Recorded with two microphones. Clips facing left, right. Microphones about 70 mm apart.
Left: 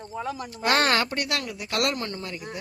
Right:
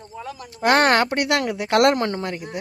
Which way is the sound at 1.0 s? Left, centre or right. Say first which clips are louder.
Right 8 dB; right.